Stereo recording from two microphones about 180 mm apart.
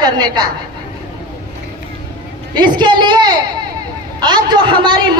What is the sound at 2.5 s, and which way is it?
A man's voice, 25° right (ahead or behind).